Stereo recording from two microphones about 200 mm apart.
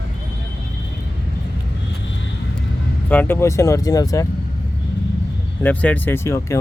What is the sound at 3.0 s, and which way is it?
Speech, 10° left (ahead or behind).